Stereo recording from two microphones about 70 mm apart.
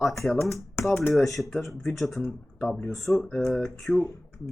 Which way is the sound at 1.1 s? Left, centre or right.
Centre.